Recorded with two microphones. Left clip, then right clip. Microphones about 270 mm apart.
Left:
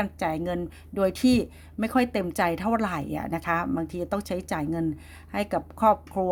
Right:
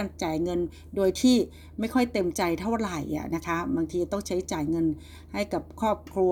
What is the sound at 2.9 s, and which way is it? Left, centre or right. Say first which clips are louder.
Speech: left 1 dB; left.